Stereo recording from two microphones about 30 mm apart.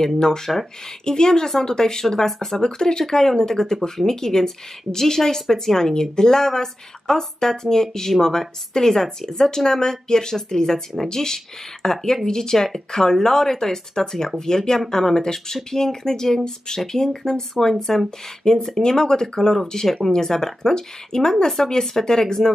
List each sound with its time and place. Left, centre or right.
0.5 s speech: centre
1.0 s speech: left; by 2.6 s centre
2.6 s speech: left; by 18.0 s centre
18.4 s speech: centre